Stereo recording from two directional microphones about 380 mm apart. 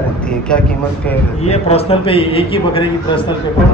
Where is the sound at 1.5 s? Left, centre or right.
Centre.